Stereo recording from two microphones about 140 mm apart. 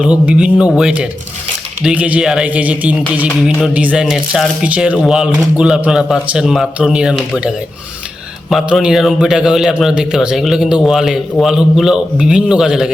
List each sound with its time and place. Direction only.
0.0 s a man's voice: 5° right (ahead or behind)